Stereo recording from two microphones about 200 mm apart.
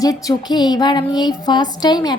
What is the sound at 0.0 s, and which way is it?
Music, 20° left (ahead or behind).